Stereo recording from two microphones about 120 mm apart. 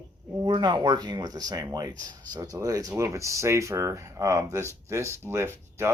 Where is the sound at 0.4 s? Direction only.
40° right (ahead or behind).